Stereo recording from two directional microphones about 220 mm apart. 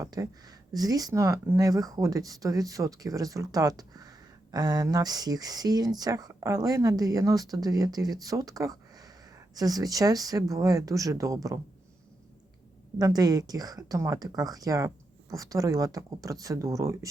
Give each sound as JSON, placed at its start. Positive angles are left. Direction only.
{"t": 0.0, "sound": "speech", "side_deg": -15}
{"t": 13.0, "sound": "speech", "side_deg": -15}